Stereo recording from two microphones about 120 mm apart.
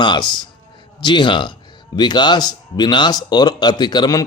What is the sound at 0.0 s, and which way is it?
Speech, 40° left (ahead or behind).